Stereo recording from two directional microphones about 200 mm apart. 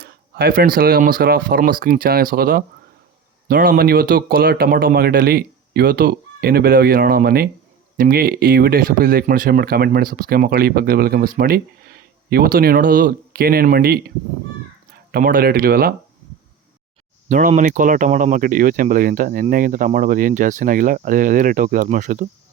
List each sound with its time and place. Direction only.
0.0 s speech: 50° right (ahead or behind)
15.1 s speech: 45° right (ahead or behind)
17.2 s speech: 40° right (ahead or behind)